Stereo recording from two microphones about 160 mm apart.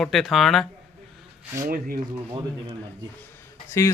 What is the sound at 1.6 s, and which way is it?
Speech, 65° right (ahead or behind).